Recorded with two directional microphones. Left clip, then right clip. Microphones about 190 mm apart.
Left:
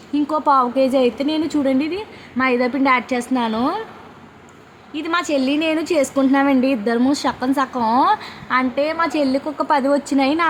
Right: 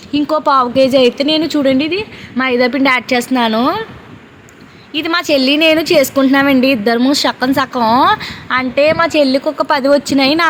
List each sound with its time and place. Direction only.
0.1 s a woman's voice: 10° right (ahead or behind)
4.9 s a woman's voice: 15° right (ahead or behind)